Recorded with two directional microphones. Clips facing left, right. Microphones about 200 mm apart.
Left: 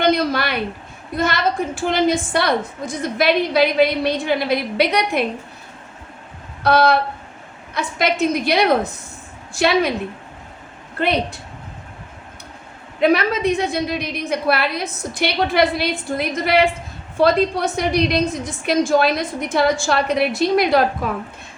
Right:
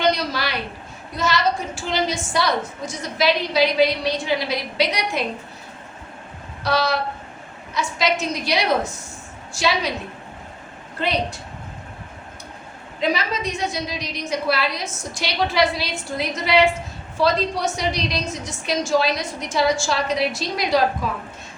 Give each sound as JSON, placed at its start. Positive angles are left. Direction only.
{"t": 0.0, "sound": "a sound", "side_deg": 55}
{"t": 1.1, "sound": "a woman's voice", "side_deg": 55}
{"t": 6.6, "sound": "a woman's voice", "side_deg": 55}
{"t": 11.0, "sound": "a woman's voice", "side_deg": 60}
{"t": 13.0, "sound": "a woman's voice", "side_deg": 60}